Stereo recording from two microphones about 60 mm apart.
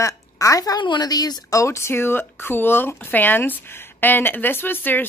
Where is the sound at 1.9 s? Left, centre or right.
Left.